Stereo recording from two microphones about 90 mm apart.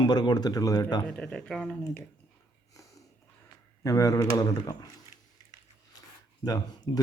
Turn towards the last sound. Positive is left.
turn(degrees=45)  # may be behind; listen again after turning